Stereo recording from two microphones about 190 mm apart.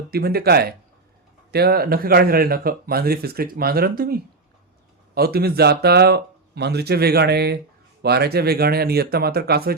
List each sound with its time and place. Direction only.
0.1 s speech: 55° right (ahead or behind)